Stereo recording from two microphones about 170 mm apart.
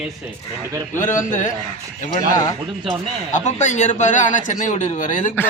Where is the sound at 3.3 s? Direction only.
45° left (ahead or behind).